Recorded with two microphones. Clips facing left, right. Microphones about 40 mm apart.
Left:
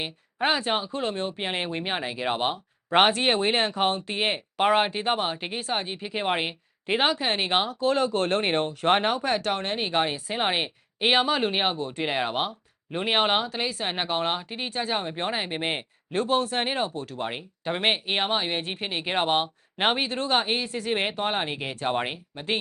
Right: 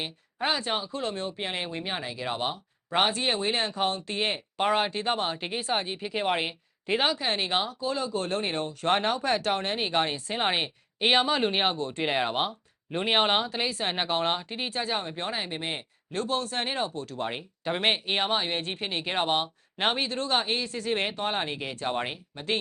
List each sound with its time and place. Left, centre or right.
0.3 s speech: left
7.1 s speech: left
7.3 s speech: left
7.6 s speech: left
8.9 s speech: centre